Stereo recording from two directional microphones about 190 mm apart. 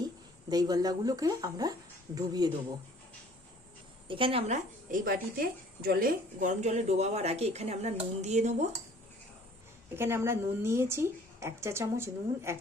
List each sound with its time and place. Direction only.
0.5 s speech: 20° right (ahead or behind)
4.1 s speech: 30° right (ahead or behind)
9.9 s speech: 15° right (ahead or behind)